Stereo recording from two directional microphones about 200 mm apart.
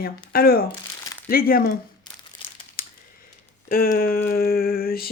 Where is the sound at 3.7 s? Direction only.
45° left (ahead or behind).